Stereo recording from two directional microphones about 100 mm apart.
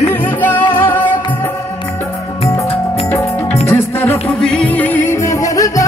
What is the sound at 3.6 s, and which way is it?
Music, 20° left (ahead or behind).